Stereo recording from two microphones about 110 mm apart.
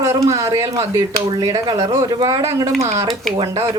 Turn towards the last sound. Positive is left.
turn(degrees=-40)  # may be behind; listen again after turning